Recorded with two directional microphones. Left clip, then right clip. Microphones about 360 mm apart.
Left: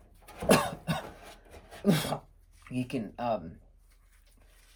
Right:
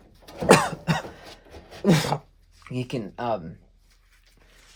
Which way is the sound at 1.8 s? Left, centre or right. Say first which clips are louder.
Right 7 dB; right.